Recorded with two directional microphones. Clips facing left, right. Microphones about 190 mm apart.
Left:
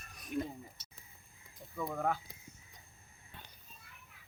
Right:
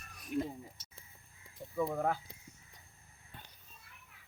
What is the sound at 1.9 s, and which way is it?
Speech, 5° right (ahead or behind).